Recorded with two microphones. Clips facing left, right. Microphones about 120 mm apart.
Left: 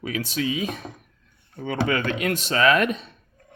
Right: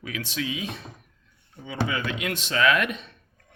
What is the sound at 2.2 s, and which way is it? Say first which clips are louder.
Speech: left 3 dB; 40° left (ahead or behind).